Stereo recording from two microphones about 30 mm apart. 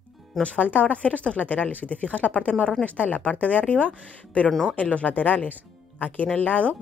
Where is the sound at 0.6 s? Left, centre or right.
Left.